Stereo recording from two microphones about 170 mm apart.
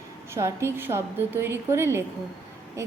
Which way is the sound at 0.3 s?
15° right (ahead or behind).